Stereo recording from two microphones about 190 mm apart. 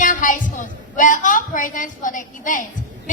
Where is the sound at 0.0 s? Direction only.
45° left (ahead or behind).